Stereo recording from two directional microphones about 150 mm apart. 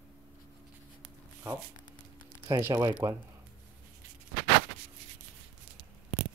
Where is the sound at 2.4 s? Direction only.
20° right (ahead or behind).